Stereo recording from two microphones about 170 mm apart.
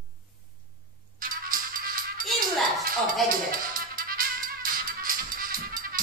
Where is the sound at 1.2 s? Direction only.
55° right (ahead or behind).